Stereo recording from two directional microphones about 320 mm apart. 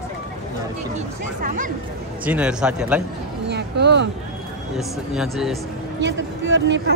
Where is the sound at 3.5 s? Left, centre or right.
Right.